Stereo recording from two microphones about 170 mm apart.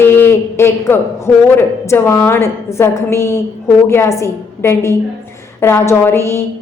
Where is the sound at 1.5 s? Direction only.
15° left (ahead or behind).